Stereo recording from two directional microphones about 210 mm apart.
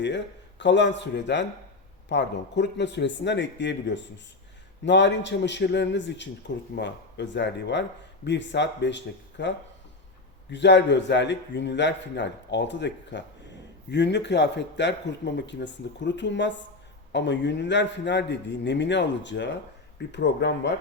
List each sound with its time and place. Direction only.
0.6 s speech: 55° left (ahead or behind)
10.5 s speech: 55° left (ahead or behind)